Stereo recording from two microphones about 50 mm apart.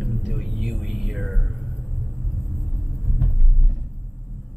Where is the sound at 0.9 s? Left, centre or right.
Centre.